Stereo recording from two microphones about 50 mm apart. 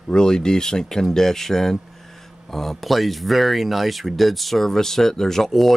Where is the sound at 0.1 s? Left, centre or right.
Centre.